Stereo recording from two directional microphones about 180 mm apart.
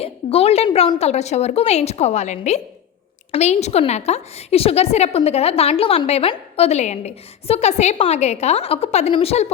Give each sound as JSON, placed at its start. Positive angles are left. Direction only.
{"t": 0.0, "sound": "a woman's voice", "side_deg": 35}